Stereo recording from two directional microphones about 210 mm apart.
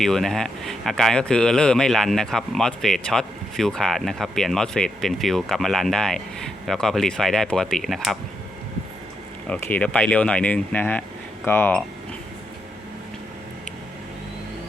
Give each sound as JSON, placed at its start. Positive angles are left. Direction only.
{"t": 0.0, "sound": "speech", "side_deg": 0}
{"t": 9.5, "sound": "speech", "side_deg": 5}